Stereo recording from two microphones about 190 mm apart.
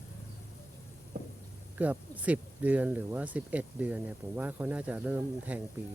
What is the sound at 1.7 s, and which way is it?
Speech, 10° right (ahead or behind).